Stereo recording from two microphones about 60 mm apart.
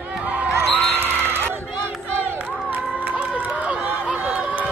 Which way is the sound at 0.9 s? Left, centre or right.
Right.